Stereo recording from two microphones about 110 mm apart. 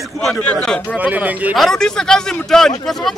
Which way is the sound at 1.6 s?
5° left (ahead or behind).